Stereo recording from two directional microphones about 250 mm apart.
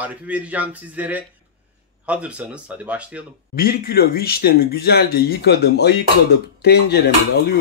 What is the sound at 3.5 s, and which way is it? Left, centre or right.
Speech, left.